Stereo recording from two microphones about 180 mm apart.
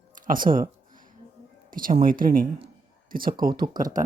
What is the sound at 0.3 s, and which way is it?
Speech, 50° right (ahead or behind).